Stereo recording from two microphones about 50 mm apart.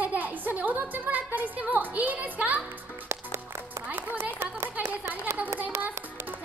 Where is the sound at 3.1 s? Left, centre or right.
Right.